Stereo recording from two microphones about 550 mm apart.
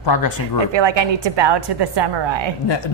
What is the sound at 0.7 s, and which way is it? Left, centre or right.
A woman's voice, right.